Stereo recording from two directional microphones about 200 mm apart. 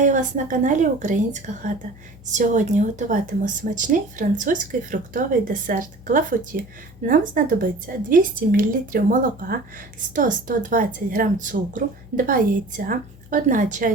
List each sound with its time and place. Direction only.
0.0 s speech: 40° right (ahead or behind)